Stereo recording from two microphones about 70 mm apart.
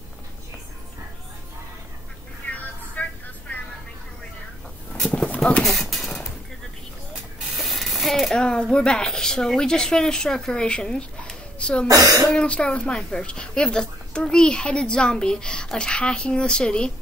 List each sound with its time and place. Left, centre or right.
2.6 s vehicle: left
5.4 s clip-clop: centre
7.4 s spray: centre
8.7 s a woman's voice: centre
11.9 s speech: right
12.4 s a woman's voice: centre